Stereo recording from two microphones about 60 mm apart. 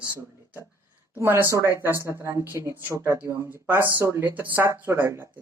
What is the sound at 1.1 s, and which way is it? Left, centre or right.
Speech, right.